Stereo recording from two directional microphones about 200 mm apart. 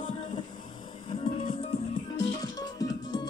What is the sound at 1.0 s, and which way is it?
Music, 25° left (ahead or behind).